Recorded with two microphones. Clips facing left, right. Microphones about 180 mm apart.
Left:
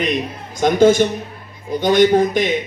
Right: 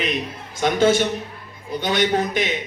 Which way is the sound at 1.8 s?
45° left (ahead or behind).